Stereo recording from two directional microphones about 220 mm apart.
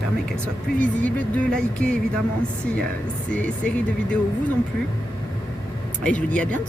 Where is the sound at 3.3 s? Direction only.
5° left (ahead or behind).